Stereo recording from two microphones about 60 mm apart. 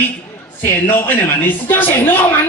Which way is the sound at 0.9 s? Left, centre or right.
Left.